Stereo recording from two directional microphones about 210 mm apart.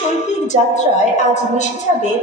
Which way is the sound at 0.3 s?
35° left (ahead or behind).